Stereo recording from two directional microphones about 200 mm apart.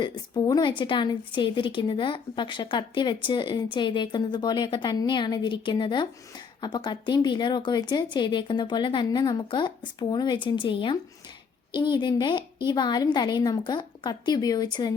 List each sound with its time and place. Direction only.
0.0 s speech: 20° left (ahead or behind)